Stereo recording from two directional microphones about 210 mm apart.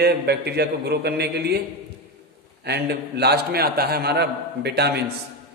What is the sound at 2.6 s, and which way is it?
A man's voice, 50° right (ahead or behind).